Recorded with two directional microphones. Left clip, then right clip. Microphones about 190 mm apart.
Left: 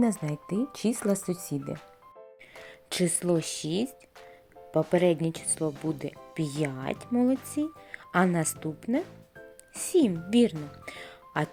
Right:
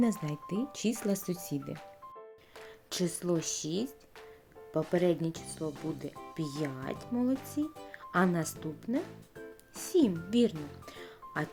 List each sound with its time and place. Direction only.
0.3 s speech: 20° left (ahead or behind)
2.9 s speech: 20° left (ahead or behind)
9.9 s a child's voice: 20° left (ahead or behind)